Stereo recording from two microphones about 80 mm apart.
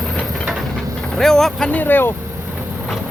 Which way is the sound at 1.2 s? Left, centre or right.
Centre.